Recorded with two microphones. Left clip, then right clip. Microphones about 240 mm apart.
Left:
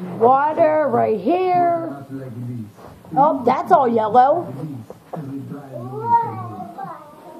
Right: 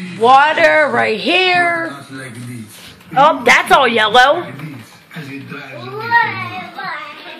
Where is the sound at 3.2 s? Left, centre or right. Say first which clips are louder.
Right 6 dB; right.